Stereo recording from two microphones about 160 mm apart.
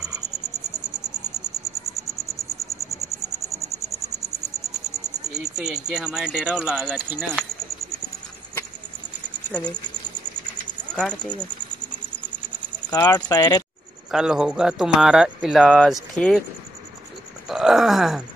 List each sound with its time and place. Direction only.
3.0 s cricket: 20° right (ahead or behind)
5.3 s speech: 5° right (ahead or behind)
9.5 s speech: 10° left (ahead or behind)
11.0 s speech: 5° left (ahead or behind)
12.9 s speech: 25° left (ahead or behind)
14.1 s speech: 5° right (ahead or behind)
17.5 s a sound: centre (ahead or behind)